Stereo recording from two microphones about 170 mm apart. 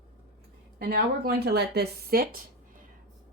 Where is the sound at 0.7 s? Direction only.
65° right (ahead or behind).